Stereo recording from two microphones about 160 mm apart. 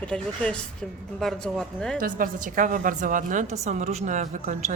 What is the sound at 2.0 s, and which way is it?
A woman's voice, 60° right (ahead or behind).